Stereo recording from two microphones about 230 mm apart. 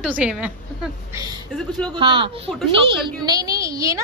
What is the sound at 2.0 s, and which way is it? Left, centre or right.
A woman's voice, right.